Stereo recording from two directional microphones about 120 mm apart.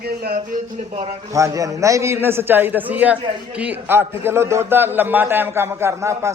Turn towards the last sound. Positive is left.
turn(degrees=-25)  # may be behind; listen again after turning